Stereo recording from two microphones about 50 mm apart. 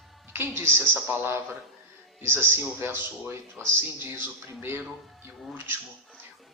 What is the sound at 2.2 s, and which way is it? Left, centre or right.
Speech, right.